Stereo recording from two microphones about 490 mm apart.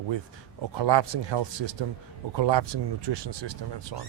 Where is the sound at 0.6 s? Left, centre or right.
Right.